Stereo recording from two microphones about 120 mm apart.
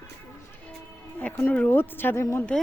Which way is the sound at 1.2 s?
15° left (ahead or behind).